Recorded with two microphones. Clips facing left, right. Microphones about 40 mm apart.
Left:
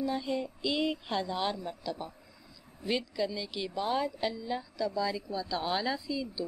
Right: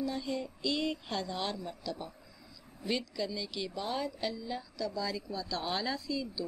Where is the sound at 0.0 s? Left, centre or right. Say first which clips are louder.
Left 3 dB; centre.